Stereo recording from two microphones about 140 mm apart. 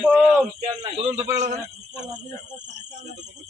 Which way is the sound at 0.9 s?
50° right (ahead or behind).